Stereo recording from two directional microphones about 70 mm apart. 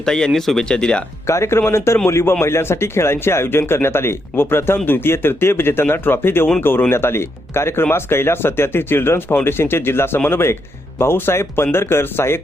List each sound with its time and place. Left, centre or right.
0.0 s speech: centre
1.3 s speech: left